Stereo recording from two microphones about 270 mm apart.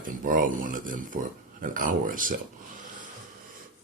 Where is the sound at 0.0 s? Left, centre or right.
Right.